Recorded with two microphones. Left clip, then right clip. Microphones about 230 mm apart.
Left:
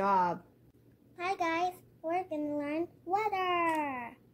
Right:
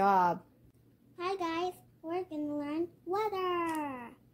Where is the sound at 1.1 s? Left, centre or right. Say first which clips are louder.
Left 2 dB; centre.